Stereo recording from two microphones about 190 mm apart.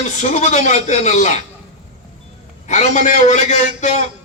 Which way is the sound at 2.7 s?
40° left (ahead or behind).